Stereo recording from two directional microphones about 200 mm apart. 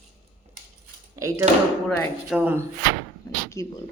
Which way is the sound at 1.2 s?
15° right (ahead or behind).